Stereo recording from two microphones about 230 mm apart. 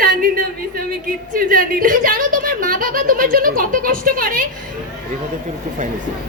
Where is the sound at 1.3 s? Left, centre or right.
Right.